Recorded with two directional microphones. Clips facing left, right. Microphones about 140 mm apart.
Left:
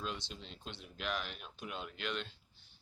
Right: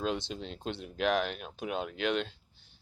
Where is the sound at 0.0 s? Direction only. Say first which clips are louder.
Right 10 dB; 80° right.